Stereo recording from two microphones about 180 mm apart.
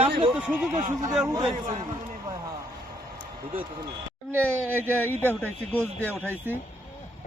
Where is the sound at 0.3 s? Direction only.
5° right (ahead or behind).